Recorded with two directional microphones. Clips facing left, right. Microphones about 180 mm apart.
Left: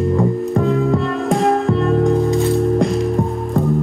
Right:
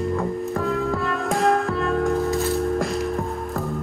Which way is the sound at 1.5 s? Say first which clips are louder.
Left 6 dB; 20° left (ahead or behind).